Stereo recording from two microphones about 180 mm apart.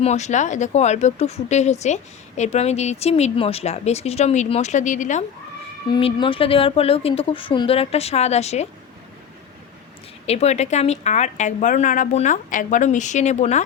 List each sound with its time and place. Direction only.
0.0 s speech: 40° left (ahead or behind)
5.9 s speech: 30° left (ahead or behind)
10.2 s speech: 35° left (ahead or behind)